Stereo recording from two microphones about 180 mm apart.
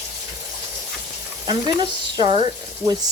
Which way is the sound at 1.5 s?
25° right (ahead or behind).